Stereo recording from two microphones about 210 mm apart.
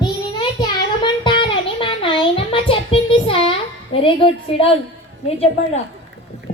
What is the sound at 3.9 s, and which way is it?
Speech, 25° left (ahead or behind).